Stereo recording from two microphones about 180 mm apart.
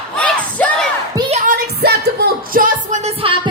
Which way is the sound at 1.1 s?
35° right (ahead or behind).